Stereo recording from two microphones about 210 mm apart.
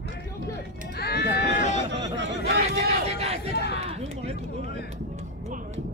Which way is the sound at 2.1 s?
50° right (ahead or behind).